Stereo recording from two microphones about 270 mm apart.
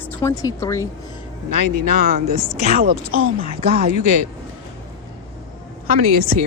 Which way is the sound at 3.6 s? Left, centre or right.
Right.